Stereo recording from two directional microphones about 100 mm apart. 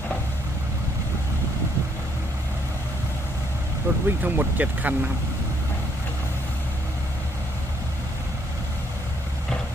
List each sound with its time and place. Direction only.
3.9 s speech: 20° right (ahead or behind)